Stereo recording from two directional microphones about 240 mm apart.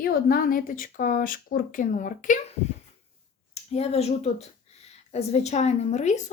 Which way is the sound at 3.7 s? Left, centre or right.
Left.